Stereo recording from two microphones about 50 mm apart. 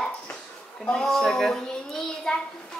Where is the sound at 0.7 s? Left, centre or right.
Centre.